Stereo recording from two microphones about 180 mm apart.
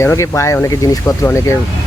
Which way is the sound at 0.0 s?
15° left (ahead or behind).